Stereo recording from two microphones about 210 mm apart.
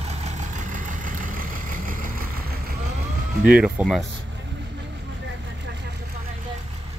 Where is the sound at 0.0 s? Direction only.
30° right (ahead or behind).